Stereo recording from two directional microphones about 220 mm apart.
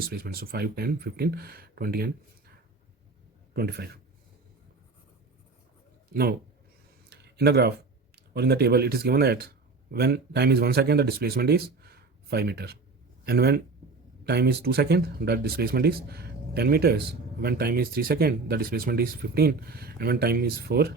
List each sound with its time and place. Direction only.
0.1 s speech: 45° right (ahead or behind)
3.5 s speech: 45° right (ahead or behind)
7.1 s a sound: 50° right (ahead or behind)
8.1 s speech: 45° right (ahead or behind)